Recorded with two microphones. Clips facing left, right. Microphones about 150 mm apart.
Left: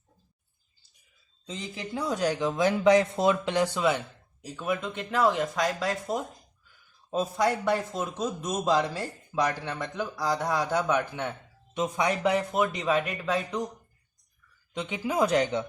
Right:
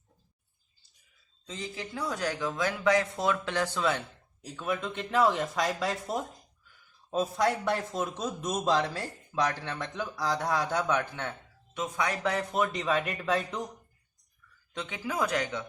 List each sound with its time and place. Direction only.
1.5 s speech: 20° left (ahead or behind)
4.4 s a man's voice: 5° left (ahead or behind)
14.7 s speech: 15° left (ahead or behind)